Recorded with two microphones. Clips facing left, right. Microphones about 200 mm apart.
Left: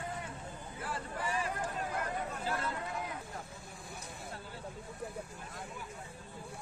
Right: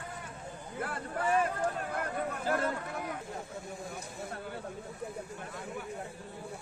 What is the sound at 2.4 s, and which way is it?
Chatter, 55° right (ahead or behind).